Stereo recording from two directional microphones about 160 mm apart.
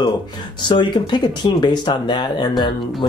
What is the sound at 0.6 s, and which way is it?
Speech, 30° left (ahead or behind).